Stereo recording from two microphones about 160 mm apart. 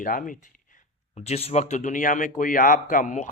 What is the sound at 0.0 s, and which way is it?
Speech, 55° left (ahead or behind).